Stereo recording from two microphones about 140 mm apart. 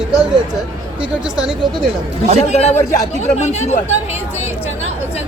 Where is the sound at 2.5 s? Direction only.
55° left (ahead or behind).